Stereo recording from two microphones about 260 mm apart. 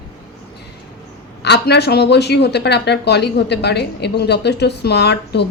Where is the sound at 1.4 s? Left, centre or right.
Left.